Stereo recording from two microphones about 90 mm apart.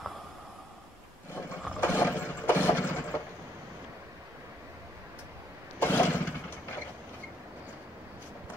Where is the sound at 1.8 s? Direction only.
25° left (ahead or behind).